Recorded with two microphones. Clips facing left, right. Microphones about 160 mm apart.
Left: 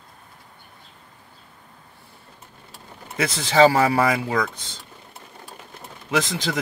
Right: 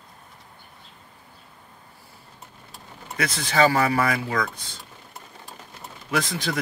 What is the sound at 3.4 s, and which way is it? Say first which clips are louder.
Speech: left 4 dB; 25° left (ahead or behind).